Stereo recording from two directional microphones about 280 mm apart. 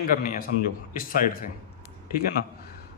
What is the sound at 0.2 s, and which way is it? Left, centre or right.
A man's voice, left.